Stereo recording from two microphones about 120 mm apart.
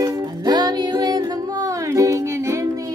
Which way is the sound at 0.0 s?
30° right (ahead or behind).